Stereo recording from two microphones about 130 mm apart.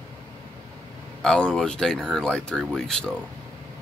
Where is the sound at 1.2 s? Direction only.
5° left (ahead or behind).